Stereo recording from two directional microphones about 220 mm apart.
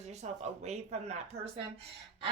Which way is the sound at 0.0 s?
30° right (ahead or behind).